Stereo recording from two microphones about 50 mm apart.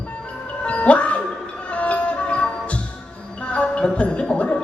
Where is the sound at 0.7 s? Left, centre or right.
Left.